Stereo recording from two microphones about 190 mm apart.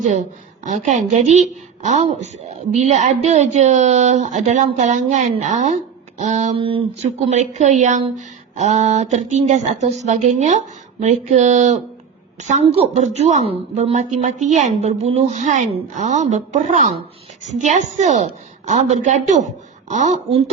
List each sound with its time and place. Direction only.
0.0 s speech: 40° right (ahead or behind)